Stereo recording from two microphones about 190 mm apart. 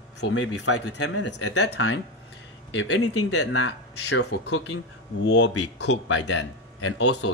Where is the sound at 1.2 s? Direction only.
70° left (ahead or behind).